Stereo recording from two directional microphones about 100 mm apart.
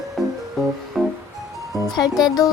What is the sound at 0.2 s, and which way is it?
Music, centre (ahead or behind).